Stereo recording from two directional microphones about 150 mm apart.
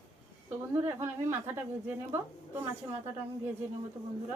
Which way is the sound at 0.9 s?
15° right (ahead or behind).